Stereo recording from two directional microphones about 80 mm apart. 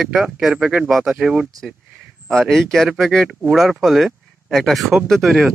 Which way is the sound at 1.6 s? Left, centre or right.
Centre.